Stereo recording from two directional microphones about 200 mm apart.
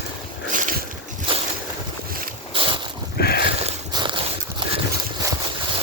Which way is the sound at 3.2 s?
50° left (ahead or behind).